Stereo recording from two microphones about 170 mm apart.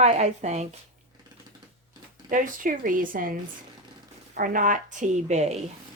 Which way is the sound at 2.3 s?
50° right (ahead or behind).